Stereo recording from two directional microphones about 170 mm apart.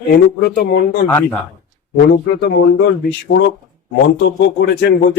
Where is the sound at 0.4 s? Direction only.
60° left (ahead or behind).